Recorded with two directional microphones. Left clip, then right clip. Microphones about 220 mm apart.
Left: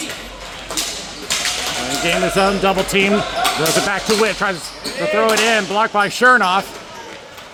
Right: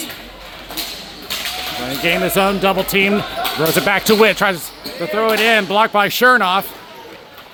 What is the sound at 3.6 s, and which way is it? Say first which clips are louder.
Speech: right 2 dB; 35° right (ahead or behind).